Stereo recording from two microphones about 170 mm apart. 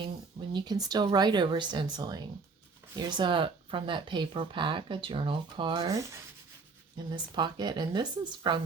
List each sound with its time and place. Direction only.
0.5 s speech: 25° right (ahead or behind)